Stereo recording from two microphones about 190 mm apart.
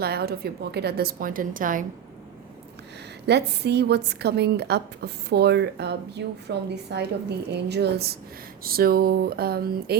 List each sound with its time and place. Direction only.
0.0 s a woman's voice: 55° right (ahead or behind)
3.2 s a woman's voice: 60° right (ahead or behind)